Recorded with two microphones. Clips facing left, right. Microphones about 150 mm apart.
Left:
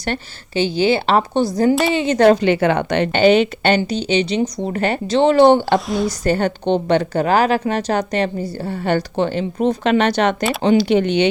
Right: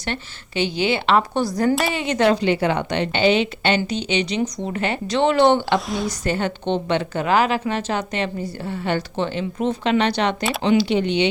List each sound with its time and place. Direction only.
0.0 s a woman's voice: 35° left (ahead or behind)
2.1 s a woman's voice: 45° left (ahead or behind)
5.0 s a woman's voice: 30° left (ahead or behind)
5.9 s a woman's voice: centre (ahead or behind)
6.2 s a woman's voice: 40° left (ahead or behind)